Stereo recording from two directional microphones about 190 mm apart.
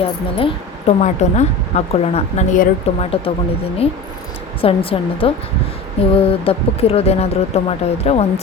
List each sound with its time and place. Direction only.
0.0 s a woman's voice: 30° left (ahead or behind)